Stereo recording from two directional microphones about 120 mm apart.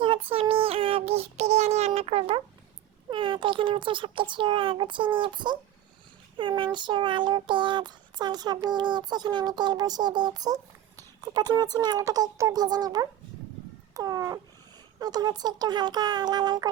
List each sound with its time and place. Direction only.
0.0 s child singing: 50° right (ahead or behind)
3.1 s a child's voice: 40° right (ahead or behind)
6.6 s child singing: 40° right (ahead or behind)
13.9 s cat: 30° right (ahead or behind)
14.9 s child singing: 35° right (ahead or behind)